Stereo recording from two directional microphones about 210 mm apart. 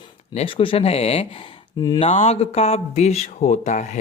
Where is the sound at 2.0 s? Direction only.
30° left (ahead or behind).